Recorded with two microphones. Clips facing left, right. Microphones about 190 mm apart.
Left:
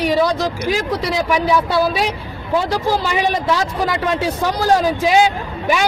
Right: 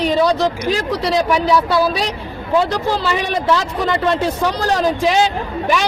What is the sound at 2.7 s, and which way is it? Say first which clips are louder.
Speech: even; 10° left (ahead or behind).